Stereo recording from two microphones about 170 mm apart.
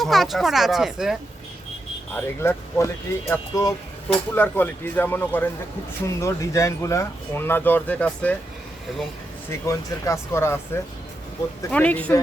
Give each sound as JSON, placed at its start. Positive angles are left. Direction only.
{"t": 0.0, "sound": "speech", "side_deg": 0}
{"t": 2.1, "sound": "speech", "side_deg": 15}
{"t": 9.5, "sound": "speech", "side_deg": 15}
{"t": 11.7, "sound": "speech", "side_deg": 10}